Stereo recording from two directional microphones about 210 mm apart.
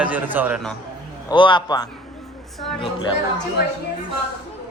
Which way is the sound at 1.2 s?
20° left (ahead or behind).